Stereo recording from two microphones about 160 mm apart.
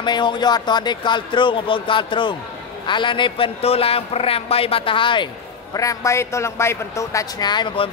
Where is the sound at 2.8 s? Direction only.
30° left (ahead or behind).